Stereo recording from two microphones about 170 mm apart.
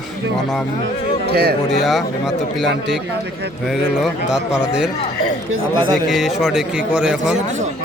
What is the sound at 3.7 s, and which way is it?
Speech, 5° right (ahead or behind).